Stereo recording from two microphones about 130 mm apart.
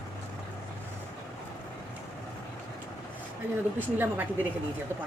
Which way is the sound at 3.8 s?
15° right (ahead or behind).